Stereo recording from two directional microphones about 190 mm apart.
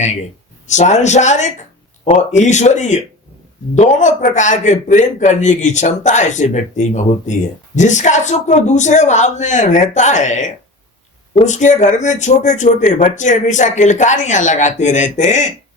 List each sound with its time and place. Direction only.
0.7 s a man's voice: 40° left (ahead or behind)